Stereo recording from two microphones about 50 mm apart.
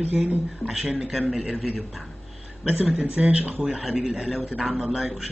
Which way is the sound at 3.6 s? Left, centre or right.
Centre.